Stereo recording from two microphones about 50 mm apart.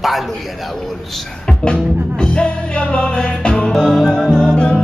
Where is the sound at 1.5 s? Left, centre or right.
Centre.